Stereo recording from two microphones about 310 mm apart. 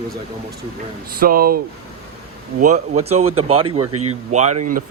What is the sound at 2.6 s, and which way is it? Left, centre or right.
A man's voice, right.